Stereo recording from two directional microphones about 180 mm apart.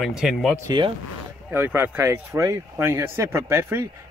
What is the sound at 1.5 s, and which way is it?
Speech, 10° right (ahead or behind).